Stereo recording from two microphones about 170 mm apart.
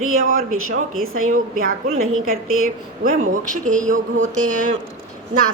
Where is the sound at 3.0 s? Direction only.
50° right (ahead or behind).